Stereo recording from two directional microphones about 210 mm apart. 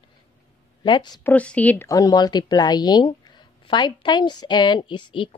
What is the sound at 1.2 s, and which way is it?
A woman's voice, 5° left (ahead or behind).